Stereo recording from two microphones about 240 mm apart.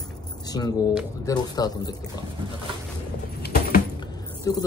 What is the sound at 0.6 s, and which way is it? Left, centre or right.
A man's voice, centre.